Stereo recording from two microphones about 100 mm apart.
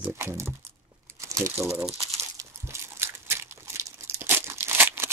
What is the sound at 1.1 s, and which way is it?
Crumpling, 30° right (ahead or behind).